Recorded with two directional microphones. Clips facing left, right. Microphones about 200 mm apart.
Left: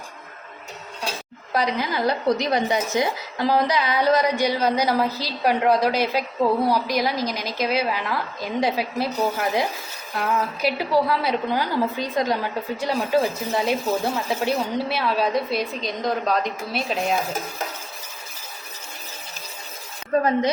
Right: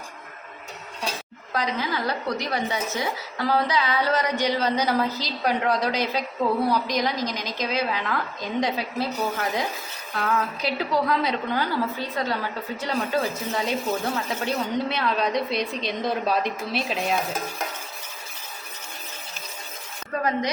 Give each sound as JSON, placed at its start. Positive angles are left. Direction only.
{"t": 1.5, "sound": "a woman's voice", "side_deg": 10}
{"t": 20.1, "sound": "speech", "side_deg": 25}